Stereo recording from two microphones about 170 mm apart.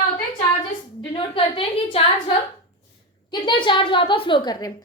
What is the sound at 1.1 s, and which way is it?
A woman's voice, 30° left (ahead or behind).